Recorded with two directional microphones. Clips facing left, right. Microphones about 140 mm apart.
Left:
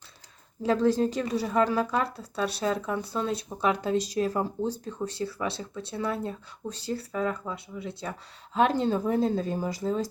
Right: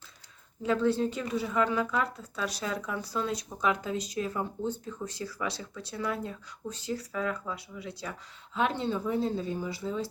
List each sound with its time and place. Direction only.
0.6 s a woman's voice: 35° left (ahead or behind)
8.5 s speech: 40° left (ahead or behind)